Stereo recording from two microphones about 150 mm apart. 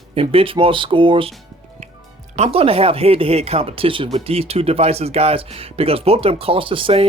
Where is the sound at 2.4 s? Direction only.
40° right (ahead or behind).